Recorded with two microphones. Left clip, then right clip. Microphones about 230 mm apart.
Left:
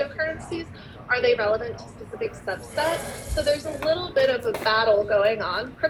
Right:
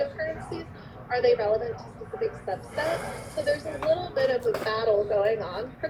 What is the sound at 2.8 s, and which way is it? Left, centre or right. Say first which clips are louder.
A woman's voice: left 4 dB; centre.